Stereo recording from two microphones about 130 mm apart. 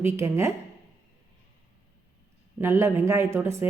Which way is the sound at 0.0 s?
20° right (ahead or behind).